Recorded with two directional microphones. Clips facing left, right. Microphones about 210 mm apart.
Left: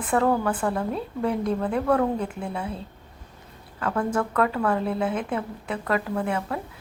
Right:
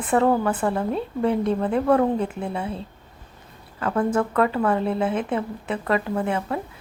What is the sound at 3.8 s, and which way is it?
Speech, 5° right (ahead or behind).